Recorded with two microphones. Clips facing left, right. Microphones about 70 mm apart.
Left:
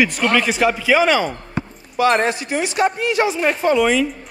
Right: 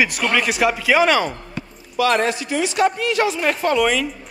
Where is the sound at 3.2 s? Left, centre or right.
Centre.